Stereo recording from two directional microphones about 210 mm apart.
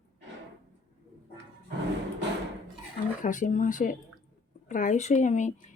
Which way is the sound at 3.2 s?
35° left (ahead or behind).